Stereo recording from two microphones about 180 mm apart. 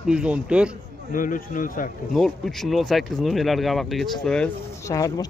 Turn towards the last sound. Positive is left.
turn(degrees=20)  # may be behind; listen again after turning